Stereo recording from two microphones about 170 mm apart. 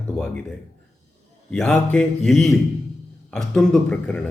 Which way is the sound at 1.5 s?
5° left (ahead or behind).